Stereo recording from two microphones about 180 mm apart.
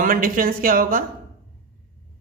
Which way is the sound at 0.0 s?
50° right (ahead or behind).